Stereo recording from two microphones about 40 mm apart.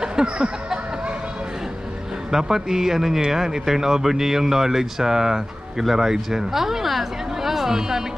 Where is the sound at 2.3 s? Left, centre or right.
Centre.